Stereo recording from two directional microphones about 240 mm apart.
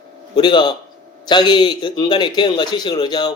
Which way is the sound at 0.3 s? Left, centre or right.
Centre.